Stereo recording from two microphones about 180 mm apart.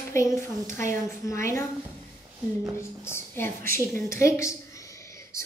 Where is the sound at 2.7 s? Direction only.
15° left (ahead or behind).